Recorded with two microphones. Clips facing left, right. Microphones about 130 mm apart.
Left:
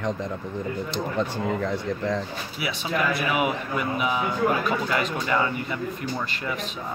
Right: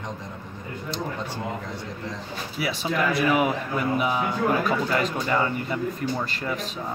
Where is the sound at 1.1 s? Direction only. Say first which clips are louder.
Left 6 dB; 75° left (ahead or behind).